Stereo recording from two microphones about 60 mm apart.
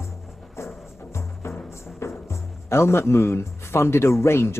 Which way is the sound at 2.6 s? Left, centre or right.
Left.